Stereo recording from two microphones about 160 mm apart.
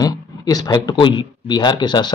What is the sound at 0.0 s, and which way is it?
Speech, 25° left (ahead or behind).